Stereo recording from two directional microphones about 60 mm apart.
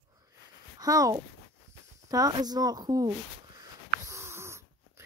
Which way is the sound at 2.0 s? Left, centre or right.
Right.